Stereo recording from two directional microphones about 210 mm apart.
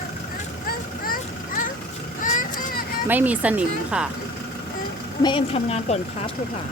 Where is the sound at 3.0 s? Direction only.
10° right (ahead or behind).